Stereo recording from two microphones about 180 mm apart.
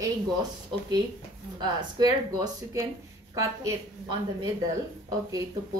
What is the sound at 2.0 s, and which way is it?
Speech, 20° right (ahead or behind).